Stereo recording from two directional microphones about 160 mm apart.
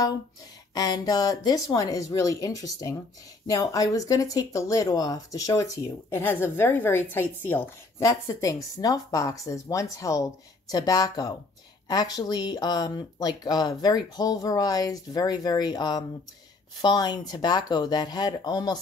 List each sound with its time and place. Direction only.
0.7 s speech: 25° left (ahead or behind)